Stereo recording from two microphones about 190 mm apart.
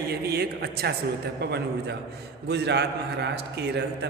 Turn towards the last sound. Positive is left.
turn(degrees=-60)  # may be behind; listen again after turning